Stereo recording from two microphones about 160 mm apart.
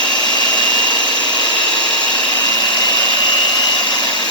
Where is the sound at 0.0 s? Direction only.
25° left (ahead or behind).